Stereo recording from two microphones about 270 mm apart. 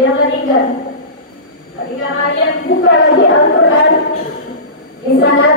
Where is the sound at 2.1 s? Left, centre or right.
Left.